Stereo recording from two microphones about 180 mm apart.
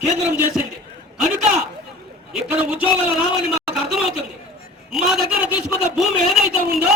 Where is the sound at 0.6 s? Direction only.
5° right (ahead or behind).